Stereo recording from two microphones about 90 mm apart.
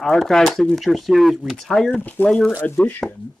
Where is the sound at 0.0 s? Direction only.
5° left (ahead or behind).